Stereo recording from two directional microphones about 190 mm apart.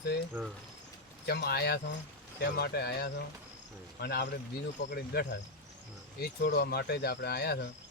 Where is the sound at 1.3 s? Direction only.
60° left (ahead or behind).